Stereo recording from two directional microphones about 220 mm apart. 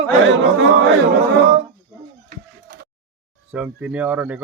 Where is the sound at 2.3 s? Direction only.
40° right (ahead or behind).